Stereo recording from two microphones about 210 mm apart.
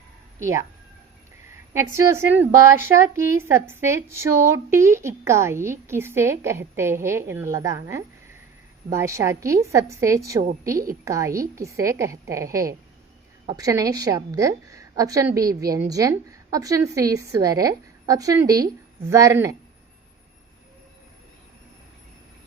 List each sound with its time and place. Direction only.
0.3 s speech: 15° right (ahead or behind)
1.7 s a woman's voice: 15° right (ahead or behind)